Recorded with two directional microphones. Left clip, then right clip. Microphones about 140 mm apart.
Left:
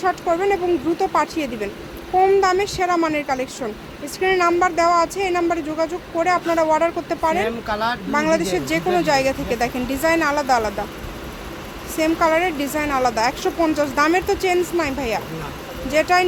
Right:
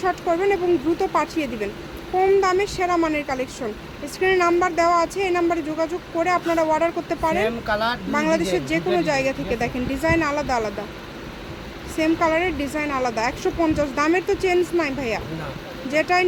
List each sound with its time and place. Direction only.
0.0 s speech: 5° left (ahead or behind)
7.4 s speech: 45° right (ahead or behind)
8.1 s speech: 10° left (ahead or behind)
11.9 s speech: 10° left (ahead or behind)